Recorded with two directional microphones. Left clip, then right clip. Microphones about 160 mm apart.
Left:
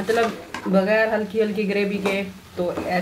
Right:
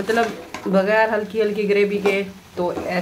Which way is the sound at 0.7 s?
25° right (ahead or behind).